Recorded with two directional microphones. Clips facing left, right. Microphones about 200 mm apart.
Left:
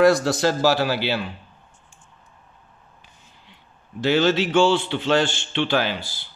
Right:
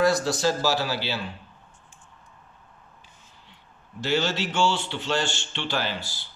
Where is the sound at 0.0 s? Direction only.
65° left (ahead or behind).